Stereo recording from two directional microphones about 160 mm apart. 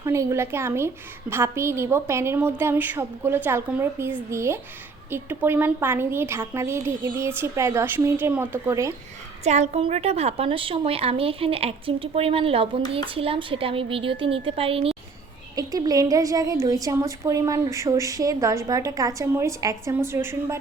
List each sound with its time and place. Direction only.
0.0 s a woman's voice: 20° right (ahead or behind)
9.4 s a woman's voice: 45° right (ahead or behind)
15.5 s a woman's voice: 25° right (ahead or behind)